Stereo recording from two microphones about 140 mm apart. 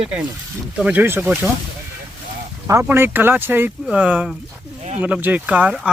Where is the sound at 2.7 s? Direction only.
20° right (ahead or behind).